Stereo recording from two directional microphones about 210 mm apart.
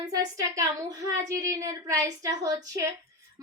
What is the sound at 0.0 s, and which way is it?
A woman's voice, 15° right (ahead or behind).